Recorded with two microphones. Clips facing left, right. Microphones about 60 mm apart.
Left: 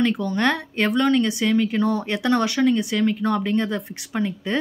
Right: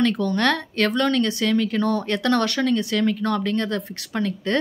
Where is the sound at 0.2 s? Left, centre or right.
Centre.